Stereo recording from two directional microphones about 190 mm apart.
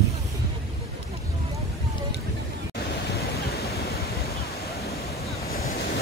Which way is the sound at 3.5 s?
55° left (ahead or behind).